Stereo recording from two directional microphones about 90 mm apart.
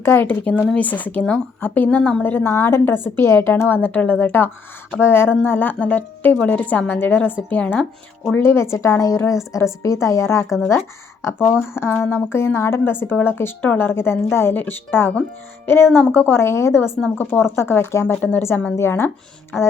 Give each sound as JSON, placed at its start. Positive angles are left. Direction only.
{"t": 0.0, "sound": "a woman's voice", "side_deg": 25}
{"t": 8.4, "sound": "a woman's voice", "side_deg": 30}